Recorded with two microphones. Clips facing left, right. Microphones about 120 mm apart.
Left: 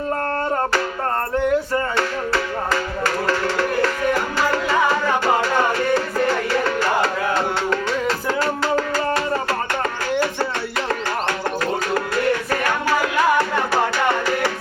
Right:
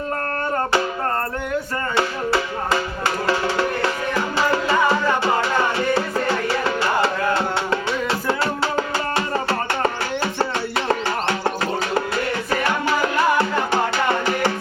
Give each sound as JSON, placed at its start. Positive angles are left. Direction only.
{"t": 2.0, "sound": "music", "side_deg": -15}
{"t": 8.3, "sound": "music", "side_deg": -20}